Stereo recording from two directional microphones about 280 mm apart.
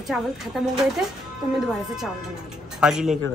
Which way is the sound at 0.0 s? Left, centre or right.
Centre.